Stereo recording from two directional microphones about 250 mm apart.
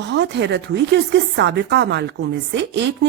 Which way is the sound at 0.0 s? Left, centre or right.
Right.